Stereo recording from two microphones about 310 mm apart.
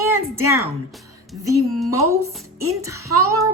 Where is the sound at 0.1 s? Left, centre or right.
Right.